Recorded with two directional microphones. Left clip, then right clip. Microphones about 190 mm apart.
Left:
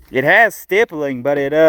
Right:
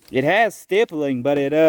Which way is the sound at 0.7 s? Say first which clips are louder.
Left 4 dB; 5° right (ahead or behind).